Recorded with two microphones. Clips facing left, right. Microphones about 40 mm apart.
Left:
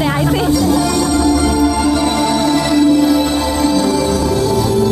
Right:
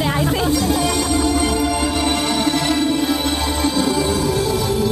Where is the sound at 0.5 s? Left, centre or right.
Right.